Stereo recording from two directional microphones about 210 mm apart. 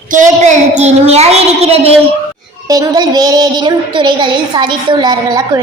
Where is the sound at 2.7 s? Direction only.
20° right (ahead or behind).